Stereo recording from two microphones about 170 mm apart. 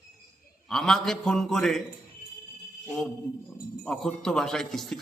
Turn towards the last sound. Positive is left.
turn(degrees=0)  # may be behind; listen again after turning